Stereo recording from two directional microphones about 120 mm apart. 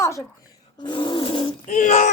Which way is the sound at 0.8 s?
45° left (ahead or behind).